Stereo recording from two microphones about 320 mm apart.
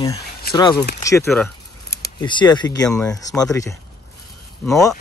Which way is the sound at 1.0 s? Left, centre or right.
Centre.